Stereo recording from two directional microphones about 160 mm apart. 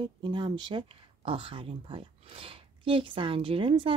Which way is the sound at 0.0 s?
30° right (ahead or behind).